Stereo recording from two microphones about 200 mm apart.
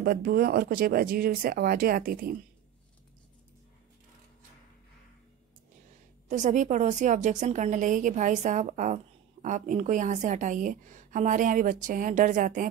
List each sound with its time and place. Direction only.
0.0 s speech: 50° right (ahead or behind)
6.2 s a woman's voice: 40° right (ahead or behind)